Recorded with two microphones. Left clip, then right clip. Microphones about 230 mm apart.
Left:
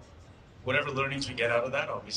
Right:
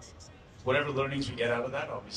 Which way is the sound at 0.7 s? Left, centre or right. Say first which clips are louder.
Even; left.